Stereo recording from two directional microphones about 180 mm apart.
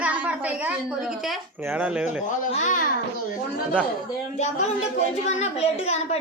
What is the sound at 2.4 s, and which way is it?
Speech, 45° left (ahead or behind).